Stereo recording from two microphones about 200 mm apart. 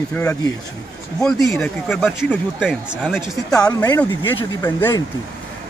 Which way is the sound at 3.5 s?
20° left (ahead or behind).